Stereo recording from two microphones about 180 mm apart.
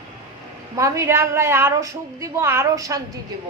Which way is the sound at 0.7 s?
15° right (ahead or behind).